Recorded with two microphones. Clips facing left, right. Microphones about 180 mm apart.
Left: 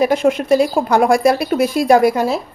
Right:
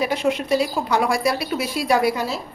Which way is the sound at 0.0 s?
50° left (ahead or behind).